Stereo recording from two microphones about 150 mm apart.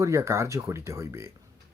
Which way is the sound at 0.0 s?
20° right (ahead or behind).